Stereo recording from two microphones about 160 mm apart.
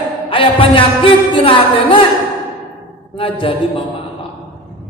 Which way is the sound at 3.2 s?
35° left (ahead or behind).